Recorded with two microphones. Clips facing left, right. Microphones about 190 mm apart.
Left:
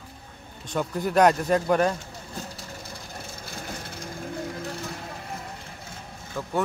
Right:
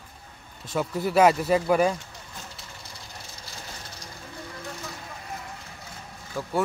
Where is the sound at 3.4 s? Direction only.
55° left (ahead or behind).